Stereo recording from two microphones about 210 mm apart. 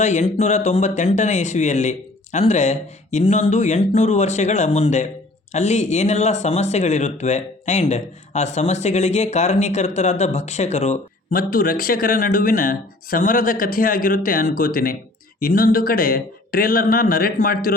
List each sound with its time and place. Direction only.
0.0 s speech: 35° left (ahead or behind)